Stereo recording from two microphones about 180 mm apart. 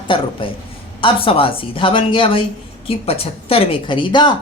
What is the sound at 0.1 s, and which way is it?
Speech, 30° left (ahead or behind).